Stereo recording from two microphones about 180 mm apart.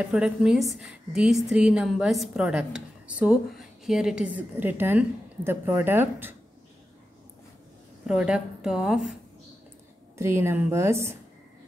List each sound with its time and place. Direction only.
0.0 s a woman's voice: 5° right (ahead or behind)
8.1 s a woman's voice: 5° right (ahead or behind)
10.1 s a woman's voice: 15° right (ahead or behind)